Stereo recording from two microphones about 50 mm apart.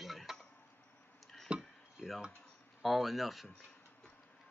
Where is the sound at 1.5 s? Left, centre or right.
Centre.